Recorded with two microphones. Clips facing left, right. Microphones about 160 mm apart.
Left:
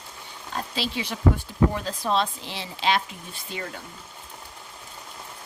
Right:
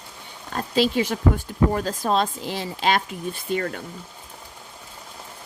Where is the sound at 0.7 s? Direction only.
45° right (ahead or behind).